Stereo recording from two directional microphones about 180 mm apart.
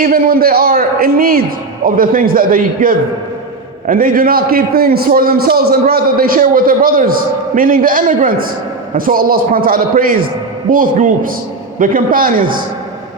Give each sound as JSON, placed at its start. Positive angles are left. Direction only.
{"t": 0.0, "sound": "a man's voice", "side_deg": -55}